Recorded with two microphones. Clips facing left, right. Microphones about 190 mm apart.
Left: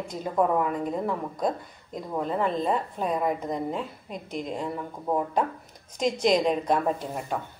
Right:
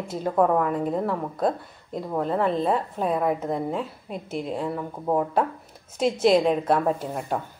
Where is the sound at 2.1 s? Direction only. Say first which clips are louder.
Right 3 dB; 40° right (ahead or behind).